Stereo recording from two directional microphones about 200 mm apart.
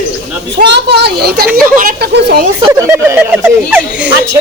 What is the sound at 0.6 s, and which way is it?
Speech, 55° right (ahead or behind).